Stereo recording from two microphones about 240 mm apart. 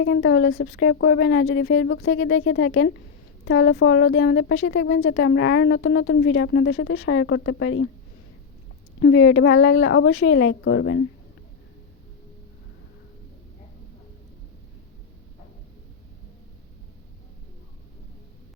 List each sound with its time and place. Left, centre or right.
0.0 s a woman's voice: left
9.0 s a woman's voice: left